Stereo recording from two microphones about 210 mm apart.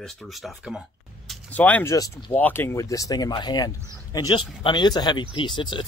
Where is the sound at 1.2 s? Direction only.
5° left (ahead or behind).